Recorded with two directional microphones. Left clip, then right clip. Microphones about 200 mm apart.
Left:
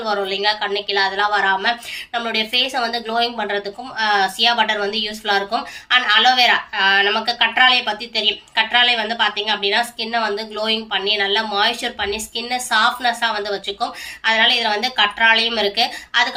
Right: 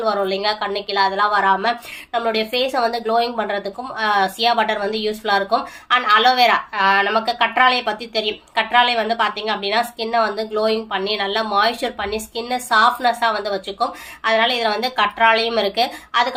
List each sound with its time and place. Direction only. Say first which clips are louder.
0.0 s speech: even; 50° right (ahead or behind)